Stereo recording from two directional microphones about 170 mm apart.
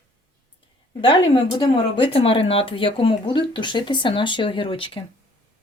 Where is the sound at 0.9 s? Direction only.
30° left (ahead or behind).